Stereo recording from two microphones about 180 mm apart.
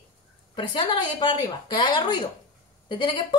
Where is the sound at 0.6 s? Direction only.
30° left (ahead or behind).